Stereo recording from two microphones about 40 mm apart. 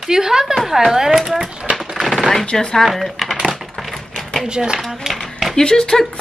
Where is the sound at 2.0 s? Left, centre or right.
Centre.